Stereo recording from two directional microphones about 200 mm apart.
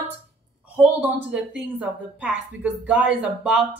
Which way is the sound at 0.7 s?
5° right (ahead or behind).